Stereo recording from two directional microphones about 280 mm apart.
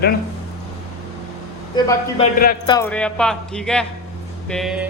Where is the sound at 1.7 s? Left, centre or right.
Centre.